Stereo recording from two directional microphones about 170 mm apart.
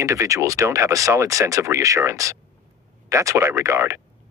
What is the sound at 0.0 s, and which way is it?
Speech, 20° right (ahead or behind).